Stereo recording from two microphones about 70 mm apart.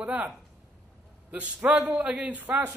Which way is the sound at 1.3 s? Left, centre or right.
Right.